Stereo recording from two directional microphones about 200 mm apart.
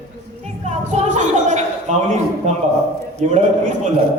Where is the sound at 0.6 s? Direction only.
35° right (ahead or behind).